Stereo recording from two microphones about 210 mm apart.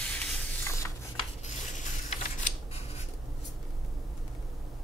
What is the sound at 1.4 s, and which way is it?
Scissors, 35° left (ahead or behind).